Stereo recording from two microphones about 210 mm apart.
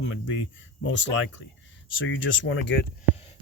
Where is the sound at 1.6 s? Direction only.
65° left (ahead or behind).